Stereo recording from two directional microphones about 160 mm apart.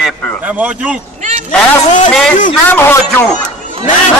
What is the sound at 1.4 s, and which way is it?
Speech, 50° left (ahead or behind).